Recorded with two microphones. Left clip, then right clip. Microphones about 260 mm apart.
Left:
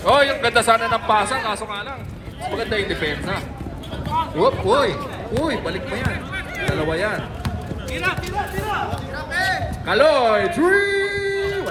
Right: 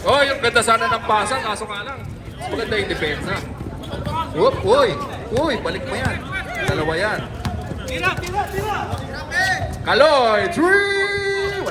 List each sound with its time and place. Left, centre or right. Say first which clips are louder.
0.0 s a man's voice: even; left
4.8 s a man's voice: right 3 dB; centre
5.4 s speech: right 3 dB; centre
6.3 s a sound: right 2 dB; centre
6.7 s speech: right 1 dB; right
7.9 s speech: right 2 dB; centre
9.3 s a sound: right 2 dB; centre
9.8 s speech: right 2 dB; right
10.6 s music: right 1 dB; right